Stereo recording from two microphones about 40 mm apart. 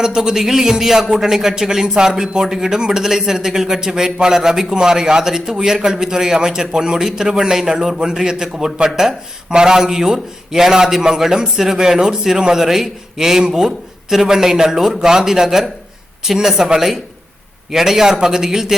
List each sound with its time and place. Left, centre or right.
0.0 s a man's voice: centre